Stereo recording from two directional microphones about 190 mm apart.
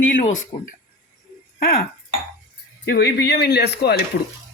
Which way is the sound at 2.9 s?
55° left (ahead or behind).